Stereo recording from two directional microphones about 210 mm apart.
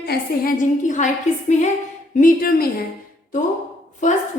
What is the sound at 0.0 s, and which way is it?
A woman's voice, 45° left (ahead or behind).